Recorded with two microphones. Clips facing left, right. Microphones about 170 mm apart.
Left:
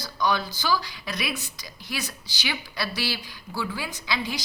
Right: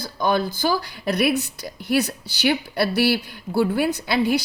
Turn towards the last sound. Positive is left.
turn(degrees=-60)  # may be behind; listen again after turning